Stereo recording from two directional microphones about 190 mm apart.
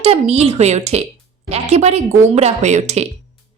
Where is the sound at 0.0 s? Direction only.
35° right (ahead or behind).